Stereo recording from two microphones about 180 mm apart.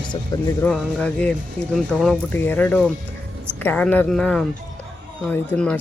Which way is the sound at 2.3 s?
10° left (ahead or behind).